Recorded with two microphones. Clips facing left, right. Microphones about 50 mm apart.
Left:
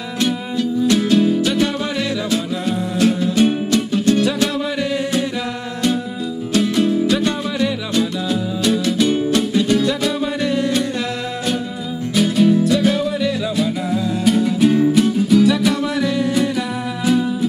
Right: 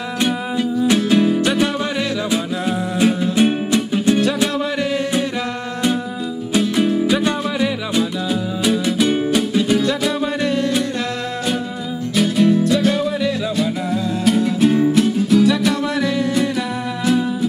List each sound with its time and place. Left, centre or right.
0.8 s music: centre
3.0 s music: centre
4.7 s singing: centre
6.8 s music: centre
12.2 s music: centre